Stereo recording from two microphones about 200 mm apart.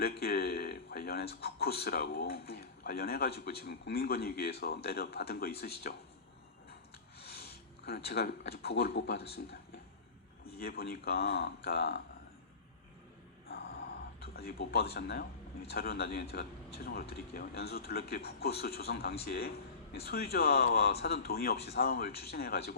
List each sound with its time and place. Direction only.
0.0 s speech: 50° left (ahead or behind)
7.9 s speech: 50° left (ahead or behind)
10.4 s speech: 50° left (ahead or behind)
13.5 s a sound: 50° left (ahead or behind)
14.9 s speech: 55° left (ahead or behind)